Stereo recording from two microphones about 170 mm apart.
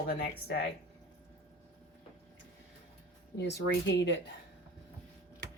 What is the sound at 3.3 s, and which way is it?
Speech, 80° left.